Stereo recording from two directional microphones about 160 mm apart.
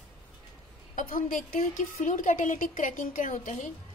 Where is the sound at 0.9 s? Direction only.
50° left (ahead or behind).